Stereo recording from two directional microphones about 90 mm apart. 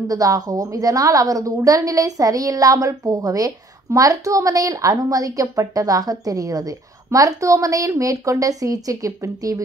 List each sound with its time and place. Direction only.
0.1 s a woman's voice: 40° right (ahead or behind)